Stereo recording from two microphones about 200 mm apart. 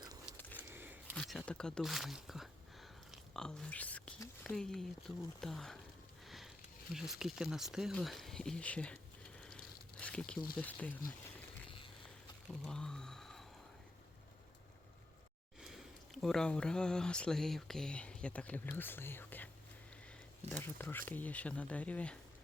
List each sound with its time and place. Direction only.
0.3 s a sound: 10° left (ahead or behind)
0.7 s a sound: 10° right (ahead or behind)
1.1 s speech: centre (ahead or behind)
6.2 s sniff: centre (ahead or behind)
6.9 s speech: centre (ahead or behind)
10.0 s a sound: 5° left (ahead or behind)
10.6 s speech: 10° left (ahead or behind)
12.5 s speech: 5° left (ahead or behind)
15.6 s speech: centre (ahead or behind)
20.5 s speech: 10° left (ahead or behind)